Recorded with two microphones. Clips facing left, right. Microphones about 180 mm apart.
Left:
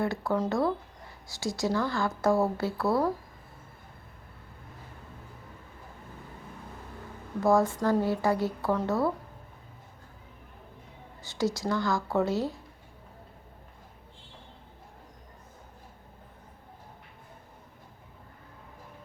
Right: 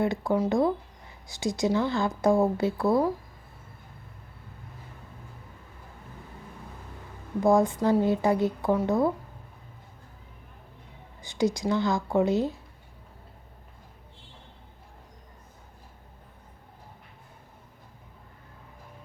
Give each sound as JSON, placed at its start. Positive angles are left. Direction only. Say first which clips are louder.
{"t": 0.0, "sound": "a woman's voice", "louder": "right 3 dB", "side_deg": -20}
{"t": 7.4, "sound": "a woman's voice", "louder": "right 2 dB", "side_deg": -20}
{"t": 11.2, "sound": "speech", "louder": "right 3 dB", "side_deg": -15}